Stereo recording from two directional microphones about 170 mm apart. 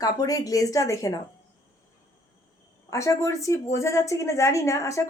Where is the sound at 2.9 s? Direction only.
20° left (ahead or behind).